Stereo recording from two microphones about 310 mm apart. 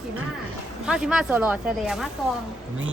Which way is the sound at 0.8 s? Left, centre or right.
Centre.